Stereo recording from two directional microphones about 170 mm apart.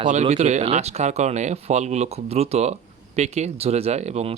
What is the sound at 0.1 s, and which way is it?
Speech, 40° right (ahead or behind).